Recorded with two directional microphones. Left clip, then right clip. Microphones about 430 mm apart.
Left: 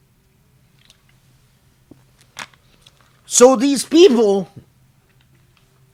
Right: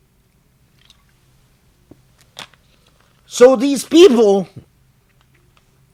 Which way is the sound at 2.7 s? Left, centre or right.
Centre.